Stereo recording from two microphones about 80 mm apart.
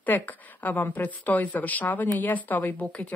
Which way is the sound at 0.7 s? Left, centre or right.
Left.